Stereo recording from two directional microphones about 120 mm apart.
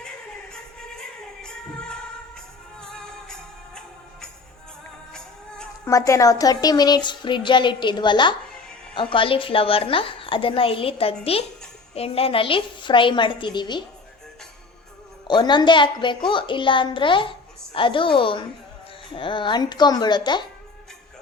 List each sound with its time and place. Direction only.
0.9 s music: 5° left (ahead or behind)
5.8 s a woman's voice: 25° left (ahead or behind)
15.3 s a woman's voice: 40° left (ahead or behind)